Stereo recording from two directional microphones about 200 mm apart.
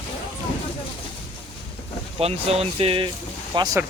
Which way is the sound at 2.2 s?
30° right (ahead or behind).